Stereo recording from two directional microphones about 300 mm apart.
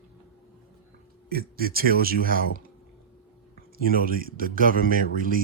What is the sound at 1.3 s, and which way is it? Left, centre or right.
A man's voice, right.